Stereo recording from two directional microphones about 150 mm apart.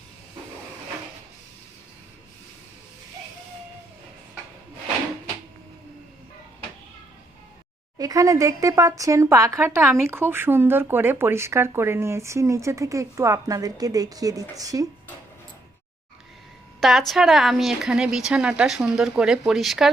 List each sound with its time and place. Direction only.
7.9 s speech: 25° right (ahead or behind)
16.8 s a woman's voice: centre (ahead or behind)